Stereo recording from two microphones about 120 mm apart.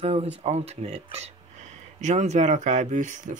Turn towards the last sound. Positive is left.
turn(degrees=-90)